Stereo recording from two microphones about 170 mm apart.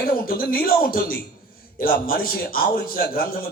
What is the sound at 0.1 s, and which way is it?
A man's voice, 60° left (ahead or behind).